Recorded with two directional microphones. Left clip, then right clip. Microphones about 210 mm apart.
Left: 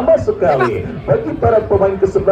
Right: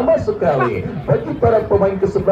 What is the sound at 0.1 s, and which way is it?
A man's voice, 35° left (ahead or behind).